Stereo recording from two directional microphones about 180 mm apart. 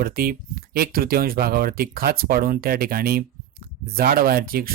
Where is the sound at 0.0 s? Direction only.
55° right (ahead or behind).